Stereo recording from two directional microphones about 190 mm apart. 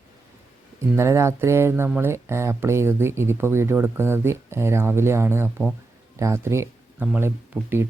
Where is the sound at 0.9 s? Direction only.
15° right (ahead or behind).